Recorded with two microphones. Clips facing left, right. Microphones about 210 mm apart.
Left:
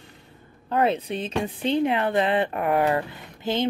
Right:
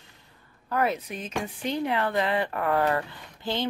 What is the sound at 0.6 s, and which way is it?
Speech, 25° left (ahead or behind).